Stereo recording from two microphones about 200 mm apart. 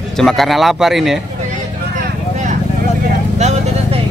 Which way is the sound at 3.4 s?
35° right (ahead or behind).